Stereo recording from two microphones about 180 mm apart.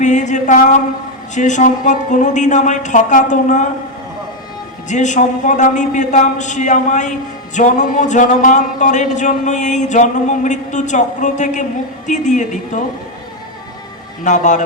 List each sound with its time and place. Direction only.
0.0 s a man's voice: 40° left (ahead or behind)
4.9 s a man's voice: 40° left (ahead or behind)
14.3 s a man's voice: 45° left (ahead or behind)